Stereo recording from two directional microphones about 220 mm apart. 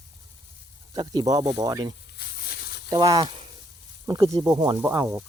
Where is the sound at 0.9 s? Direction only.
20° right (ahead or behind).